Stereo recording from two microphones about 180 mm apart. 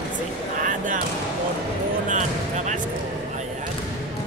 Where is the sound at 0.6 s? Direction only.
45° right (ahead or behind).